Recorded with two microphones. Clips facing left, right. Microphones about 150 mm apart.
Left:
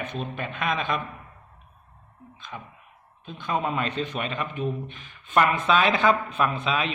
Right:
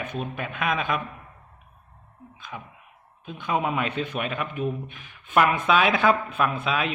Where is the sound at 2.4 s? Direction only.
10° right (ahead or behind).